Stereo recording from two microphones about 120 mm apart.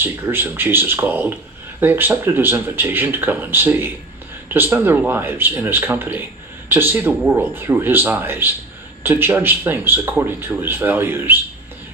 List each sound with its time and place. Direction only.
0.0 s speech: 20° right (ahead or behind)